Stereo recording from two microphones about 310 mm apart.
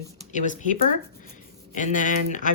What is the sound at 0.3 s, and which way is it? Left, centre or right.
Speech, left.